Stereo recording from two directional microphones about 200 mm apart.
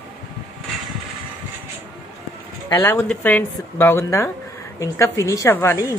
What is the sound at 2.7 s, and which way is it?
A woman's voice, 15° left (ahead or behind).